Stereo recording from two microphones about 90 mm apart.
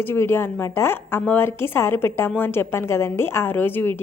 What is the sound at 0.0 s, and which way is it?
A woman's voice, 25° left (ahead or behind).